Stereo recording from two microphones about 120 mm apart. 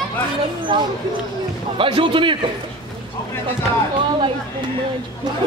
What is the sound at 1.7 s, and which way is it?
Speech, 50° right (ahead or behind).